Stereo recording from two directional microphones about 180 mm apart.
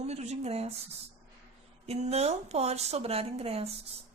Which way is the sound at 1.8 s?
35° right (ahead or behind).